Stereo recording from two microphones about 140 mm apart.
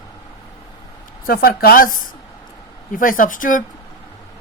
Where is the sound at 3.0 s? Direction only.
75° left (ahead or behind).